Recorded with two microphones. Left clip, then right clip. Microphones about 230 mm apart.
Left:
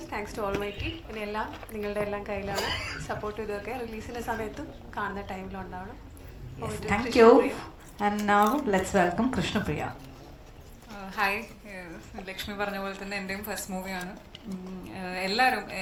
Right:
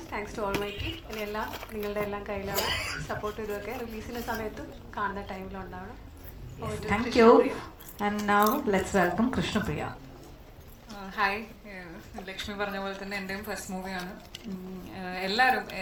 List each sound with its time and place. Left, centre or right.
0.1 s a woman's voice: left
1.5 s a woman's voice: right
1.8 s a woman's voice: left
2.6 s a woman's voice: right
3.1 s a woman's voice: left
11.1 s a woman's voice: left